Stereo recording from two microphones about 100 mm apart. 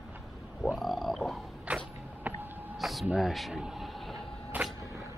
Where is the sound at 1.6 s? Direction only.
15° right (ahead or behind).